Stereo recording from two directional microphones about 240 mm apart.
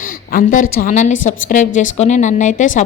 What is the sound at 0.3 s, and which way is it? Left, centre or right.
A woman's voice, left.